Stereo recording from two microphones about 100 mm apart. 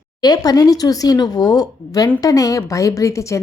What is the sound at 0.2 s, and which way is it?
A woman's voice, 40° left (ahead or behind).